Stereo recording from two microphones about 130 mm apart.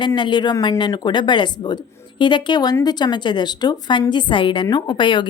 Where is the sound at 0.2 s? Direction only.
35° left (ahead or behind).